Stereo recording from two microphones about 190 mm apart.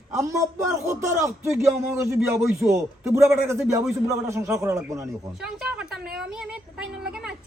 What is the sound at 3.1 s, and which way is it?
A man's voice, 15° right (ahead or behind).